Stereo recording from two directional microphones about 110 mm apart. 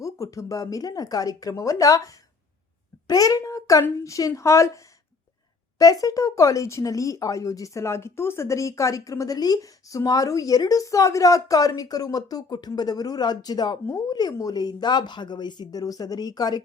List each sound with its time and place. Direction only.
0.0 s speech: 30° left (ahead or behind)
5.8 s speech: 35° left (ahead or behind)